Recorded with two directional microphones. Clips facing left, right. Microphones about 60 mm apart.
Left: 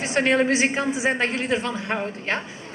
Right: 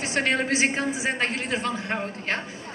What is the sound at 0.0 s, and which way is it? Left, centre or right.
A woman's voice, left.